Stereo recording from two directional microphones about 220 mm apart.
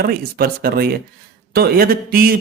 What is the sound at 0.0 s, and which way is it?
Speech, 45° right (ahead or behind).